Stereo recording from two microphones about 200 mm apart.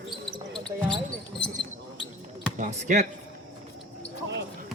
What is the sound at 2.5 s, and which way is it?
Speech, 35° right (ahead or behind).